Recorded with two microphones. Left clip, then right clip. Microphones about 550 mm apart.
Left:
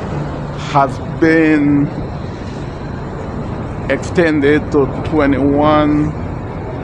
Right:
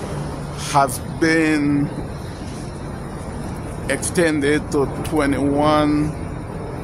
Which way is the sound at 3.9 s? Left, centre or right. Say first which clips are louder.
Left 5 dB; right.